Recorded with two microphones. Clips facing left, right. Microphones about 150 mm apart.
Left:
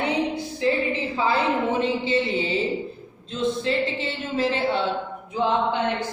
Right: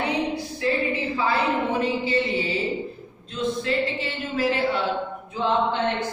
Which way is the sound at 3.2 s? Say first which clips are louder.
Left 1 dB; 25° left (ahead or behind).